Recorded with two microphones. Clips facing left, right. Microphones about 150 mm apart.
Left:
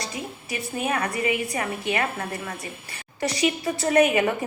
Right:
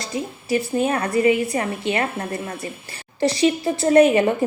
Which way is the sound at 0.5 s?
30° right (ahead or behind).